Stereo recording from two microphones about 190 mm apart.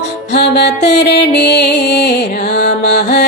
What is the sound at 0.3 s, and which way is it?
Music, 60° left (ahead or behind).